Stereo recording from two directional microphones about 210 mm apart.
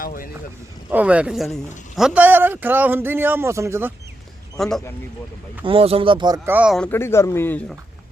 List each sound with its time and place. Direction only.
0.0 s speech: 40° left (ahead or behind)
0.9 s a man's voice: 5° right (ahead or behind)
4.5 s speech: centre (ahead or behind)
5.6 s speech: 25° right (ahead or behind); by 7.8 s 10° left (ahead or behind)